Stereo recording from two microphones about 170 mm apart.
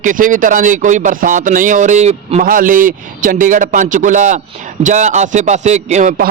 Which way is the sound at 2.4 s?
55° right (ahead or behind).